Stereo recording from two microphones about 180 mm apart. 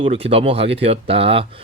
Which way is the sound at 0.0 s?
30° right (ahead or behind).